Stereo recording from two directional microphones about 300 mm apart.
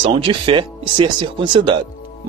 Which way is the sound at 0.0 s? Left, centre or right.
Centre.